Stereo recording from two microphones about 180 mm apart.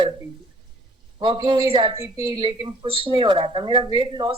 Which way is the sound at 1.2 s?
25° right (ahead or behind).